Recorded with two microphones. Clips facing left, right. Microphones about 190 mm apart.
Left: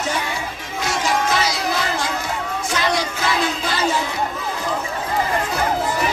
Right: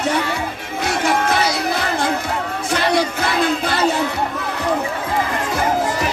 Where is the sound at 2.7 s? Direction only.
60° right (ahead or behind).